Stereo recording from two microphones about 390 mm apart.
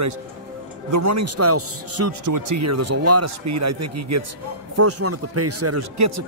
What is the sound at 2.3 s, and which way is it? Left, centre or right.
A man's voice, right.